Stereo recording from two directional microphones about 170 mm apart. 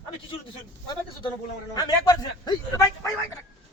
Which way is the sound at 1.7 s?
25° left (ahead or behind).